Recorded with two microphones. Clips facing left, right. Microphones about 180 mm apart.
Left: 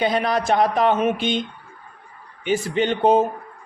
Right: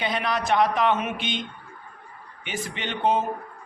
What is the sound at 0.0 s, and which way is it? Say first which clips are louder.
Speech: left 6 dB; 40° left (ahead or behind).